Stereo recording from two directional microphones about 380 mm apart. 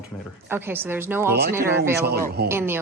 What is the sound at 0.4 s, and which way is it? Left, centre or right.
A woman's voice, centre.